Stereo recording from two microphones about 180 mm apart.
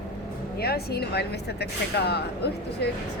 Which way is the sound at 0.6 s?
60° left (ahead or behind).